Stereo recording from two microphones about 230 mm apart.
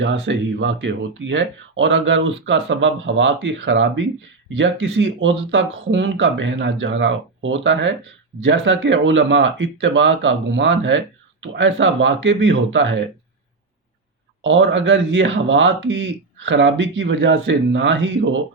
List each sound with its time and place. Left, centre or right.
0.0 s speech: right
14.4 s speech: right